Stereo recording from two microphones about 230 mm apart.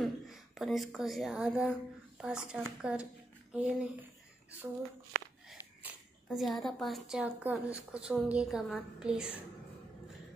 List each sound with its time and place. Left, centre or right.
0.0 s speech: centre
3.5 s a sound: centre
5.5 s speech: centre